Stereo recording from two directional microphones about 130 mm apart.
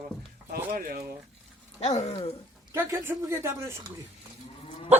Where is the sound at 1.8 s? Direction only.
60° left (ahead or behind).